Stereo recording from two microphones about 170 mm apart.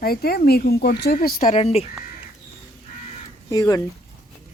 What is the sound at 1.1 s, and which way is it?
Speech, 55° left (ahead or behind).